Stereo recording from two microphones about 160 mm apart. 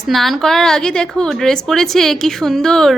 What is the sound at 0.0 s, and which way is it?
Speech, centre (ahead or behind).